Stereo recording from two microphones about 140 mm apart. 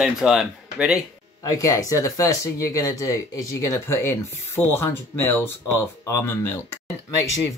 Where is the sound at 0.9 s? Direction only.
25° left (ahead or behind).